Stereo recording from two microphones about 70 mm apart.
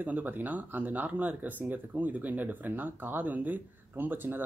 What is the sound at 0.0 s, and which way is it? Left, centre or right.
Speech, right.